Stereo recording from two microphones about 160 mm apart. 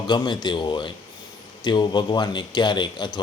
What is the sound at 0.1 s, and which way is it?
A man's voice, 30° left (ahead or behind).